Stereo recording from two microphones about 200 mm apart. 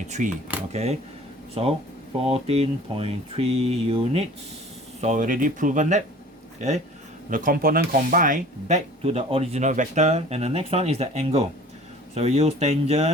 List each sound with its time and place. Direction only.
0.2 s speech: 40° right (ahead or behind)